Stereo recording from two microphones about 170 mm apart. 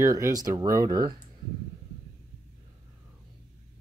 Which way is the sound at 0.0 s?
20° right (ahead or behind).